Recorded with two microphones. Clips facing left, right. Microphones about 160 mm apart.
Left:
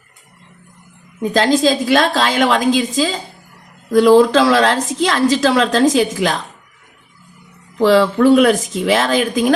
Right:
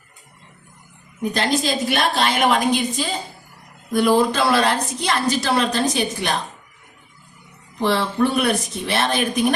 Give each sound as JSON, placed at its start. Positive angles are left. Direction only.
{"t": 1.2, "sound": "a woman's voice", "side_deg": 90}
{"t": 7.8, "sound": "a woman's voice", "side_deg": 90}